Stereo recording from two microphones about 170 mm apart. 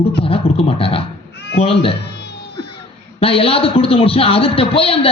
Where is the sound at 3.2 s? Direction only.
35° left (ahead or behind).